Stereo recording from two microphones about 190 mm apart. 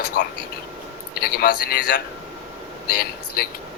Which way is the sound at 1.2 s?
50° left (ahead or behind).